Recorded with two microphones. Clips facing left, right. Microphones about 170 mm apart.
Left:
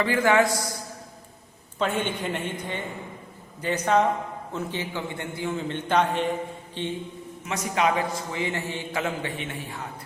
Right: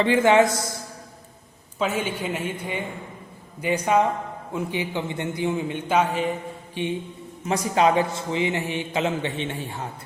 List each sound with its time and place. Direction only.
0.0 s a man's voice: 20° right (ahead or behind)
1.8 s a man's voice: 5° right (ahead or behind)
7.4 s a man's voice: 30° right (ahead or behind)